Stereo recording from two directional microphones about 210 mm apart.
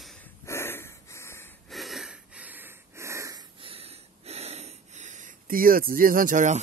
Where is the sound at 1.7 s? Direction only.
Centre (ahead or behind).